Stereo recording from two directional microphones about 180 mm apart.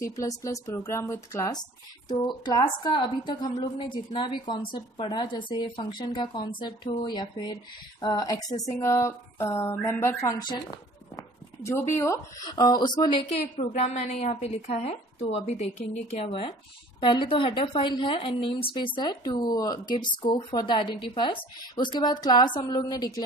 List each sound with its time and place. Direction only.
0.0 s a woman's voice: 20° left (ahead or behind)
13.3 s a woman's voice: 40° left (ahead or behind); by 23.2 s 20° left (ahead or behind)